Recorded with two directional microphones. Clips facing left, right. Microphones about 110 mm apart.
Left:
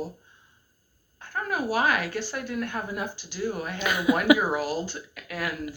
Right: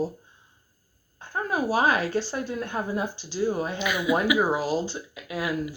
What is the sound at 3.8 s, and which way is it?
Speech, 50° left (ahead or behind).